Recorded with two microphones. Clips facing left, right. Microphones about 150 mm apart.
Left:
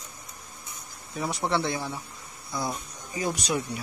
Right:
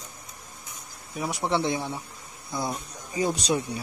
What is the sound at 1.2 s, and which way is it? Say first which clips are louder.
Speech: right 1 dB; 15° right (ahead or behind).